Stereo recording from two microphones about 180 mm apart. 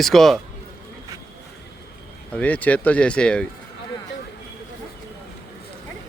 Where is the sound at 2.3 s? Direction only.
10° left (ahead or behind).